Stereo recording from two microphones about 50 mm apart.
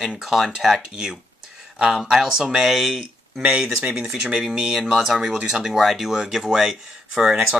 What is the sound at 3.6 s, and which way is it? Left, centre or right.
Speech, centre.